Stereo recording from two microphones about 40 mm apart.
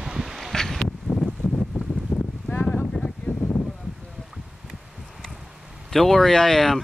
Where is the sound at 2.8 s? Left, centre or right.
Left.